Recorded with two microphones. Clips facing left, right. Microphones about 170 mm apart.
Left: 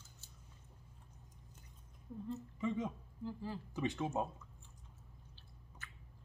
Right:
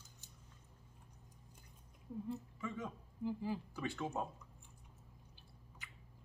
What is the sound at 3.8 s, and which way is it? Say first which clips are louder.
Speech: left 4 dB; 20° left (ahead or behind).